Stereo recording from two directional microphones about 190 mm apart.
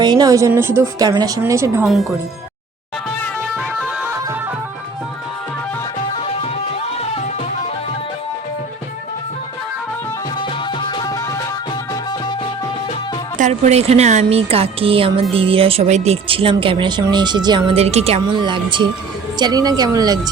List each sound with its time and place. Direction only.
0.0 s a woman's voice: 20° right (ahead or behind)
1.8 s speech: centre (ahead or behind)
3.5 s music: 5° right (ahead or behind)
6.2 s music: 30° left (ahead or behind)
10.8 s music: 25° left (ahead or behind)
13.4 s speech: 35° right (ahead or behind)